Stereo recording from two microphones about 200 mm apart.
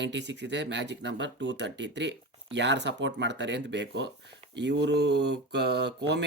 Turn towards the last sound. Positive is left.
turn(degrees=-60)  # may be behind; listen again after turning